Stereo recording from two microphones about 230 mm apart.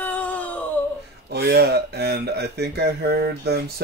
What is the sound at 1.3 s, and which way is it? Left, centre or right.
Speech, right.